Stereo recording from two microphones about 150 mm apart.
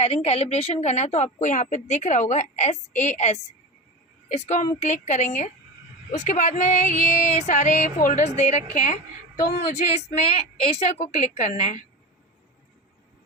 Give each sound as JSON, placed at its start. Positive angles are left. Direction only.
{"t": 0.0, "sound": "a woman's voice", "side_deg": 45}